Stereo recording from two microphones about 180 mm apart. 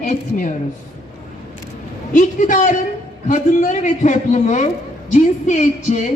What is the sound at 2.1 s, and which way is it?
A woman's voice, 45° left (ahead or behind).